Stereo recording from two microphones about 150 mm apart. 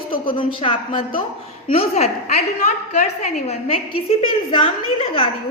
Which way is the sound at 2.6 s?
55° left (ahead or behind).